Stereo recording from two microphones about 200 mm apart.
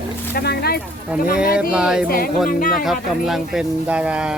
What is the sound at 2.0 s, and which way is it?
Speech, 45° left (ahead or behind).